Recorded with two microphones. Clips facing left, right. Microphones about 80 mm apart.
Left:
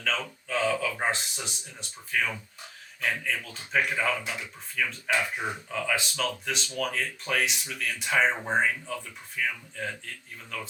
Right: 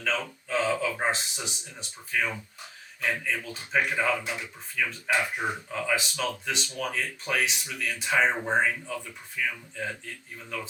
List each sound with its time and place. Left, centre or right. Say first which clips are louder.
0.0 s speech: right 1 dB; centre
9.4 s speech: even; centre